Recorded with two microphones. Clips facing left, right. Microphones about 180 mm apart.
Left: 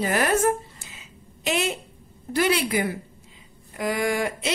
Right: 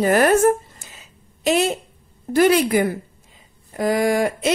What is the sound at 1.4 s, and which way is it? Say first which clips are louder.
A woman's voice: right 7 dB; 40° right (ahead or behind).